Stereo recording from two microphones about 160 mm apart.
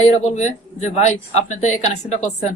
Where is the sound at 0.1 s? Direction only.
45° left (ahead or behind).